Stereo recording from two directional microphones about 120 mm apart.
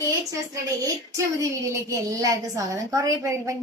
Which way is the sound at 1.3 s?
30° right (ahead or behind).